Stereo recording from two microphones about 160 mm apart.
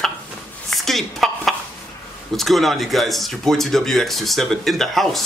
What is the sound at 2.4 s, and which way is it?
Speech, centre (ahead or behind).